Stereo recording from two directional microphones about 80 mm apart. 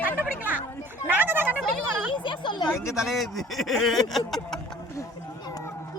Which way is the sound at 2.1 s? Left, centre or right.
Left.